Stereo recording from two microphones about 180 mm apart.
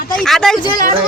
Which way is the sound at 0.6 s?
25° left (ahead or behind).